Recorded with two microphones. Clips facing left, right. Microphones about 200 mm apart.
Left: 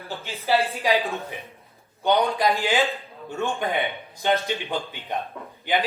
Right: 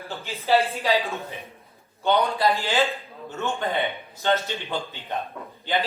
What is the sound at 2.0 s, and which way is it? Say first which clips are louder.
Speech: left 1 dB; 15° left (ahead or behind).